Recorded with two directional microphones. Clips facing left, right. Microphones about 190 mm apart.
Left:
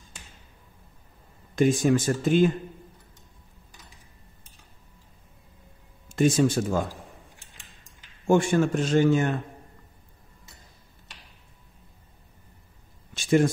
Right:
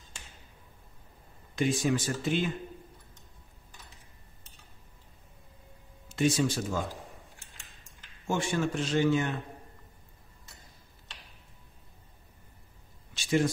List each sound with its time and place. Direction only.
1.5 s a man's voice: 45° left (ahead or behind)
6.0 s speech: 50° left (ahead or behind)
8.3 s a man's voice: 50° left (ahead or behind)
13.1 s a sound: 50° left (ahead or behind)